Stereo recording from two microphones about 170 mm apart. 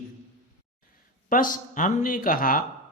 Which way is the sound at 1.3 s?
50° left (ahead or behind).